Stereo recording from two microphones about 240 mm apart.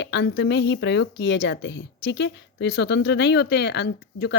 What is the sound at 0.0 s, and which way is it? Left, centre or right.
A woman's voice, left.